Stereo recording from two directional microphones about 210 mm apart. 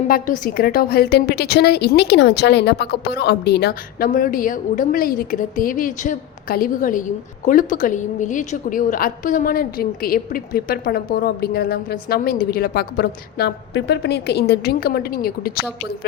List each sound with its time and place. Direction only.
0.1 s a woman's voice: 45° left (ahead or behind)